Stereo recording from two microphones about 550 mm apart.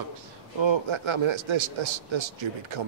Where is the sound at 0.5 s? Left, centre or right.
Right.